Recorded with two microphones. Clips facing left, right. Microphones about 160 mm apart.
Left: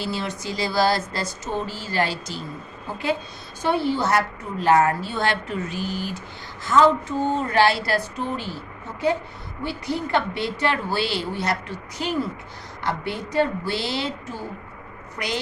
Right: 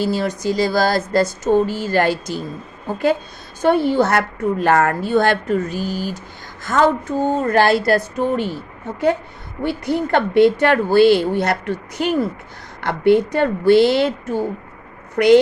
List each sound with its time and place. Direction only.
0.0 s a woman's voice: 45° right (ahead or behind)
9.6 s a woman's voice: 55° right (ahead or behind)